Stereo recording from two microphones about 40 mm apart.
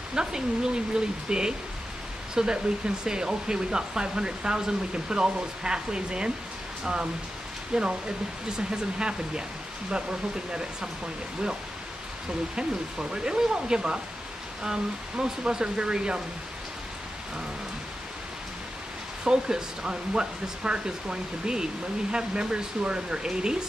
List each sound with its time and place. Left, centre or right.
0.1 s speech: centre
8.5 s speech: right
13.1 s speech: centre
19.2 s speech: centre